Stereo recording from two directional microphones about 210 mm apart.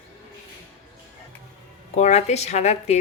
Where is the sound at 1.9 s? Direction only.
30° left (ahead or behind).